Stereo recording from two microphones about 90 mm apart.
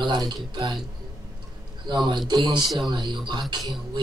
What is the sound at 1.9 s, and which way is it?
Speech, 55° right (ahead or behind).